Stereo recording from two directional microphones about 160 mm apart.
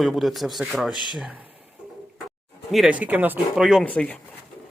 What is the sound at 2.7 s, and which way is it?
Speech, 5° right (ahead or behind).